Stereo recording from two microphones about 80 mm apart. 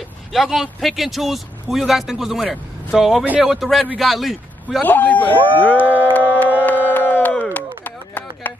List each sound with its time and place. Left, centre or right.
0.3 s speech: centre
3.3 s speech: centre
3.5 s a man's voice: centre
4.8 s speech: left
5.8 s music: right
6.1 s a sound: left